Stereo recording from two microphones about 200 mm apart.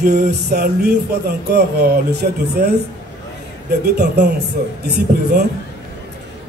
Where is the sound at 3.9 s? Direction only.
55° right (ahead or behind).